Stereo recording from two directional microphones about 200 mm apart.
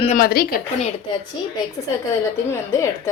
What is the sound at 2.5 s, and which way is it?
Speech, 15° left (ahead or behind).